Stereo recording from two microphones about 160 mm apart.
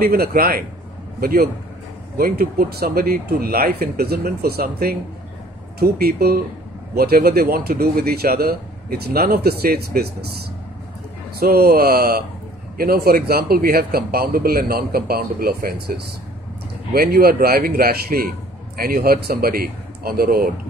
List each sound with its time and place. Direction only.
0.0 s speech: 75° right (ahead or behind)
16.9 s speech: 70° right (ahead or behind)